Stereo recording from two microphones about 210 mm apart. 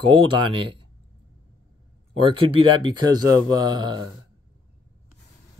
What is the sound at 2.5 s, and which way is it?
Speech, 25° right (ahead or behind).